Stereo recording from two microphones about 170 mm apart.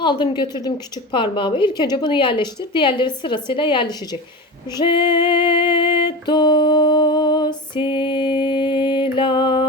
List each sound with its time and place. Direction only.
0.0 s a woman's voice: 30° left (ahead or behind)
4.8 s music: 30° left (ahead or behind)